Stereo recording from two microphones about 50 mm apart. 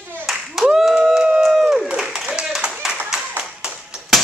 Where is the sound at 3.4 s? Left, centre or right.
Centre.